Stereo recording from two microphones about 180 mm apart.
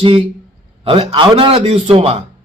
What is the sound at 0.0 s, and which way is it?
A man's voice, 30° right (ahead or behind).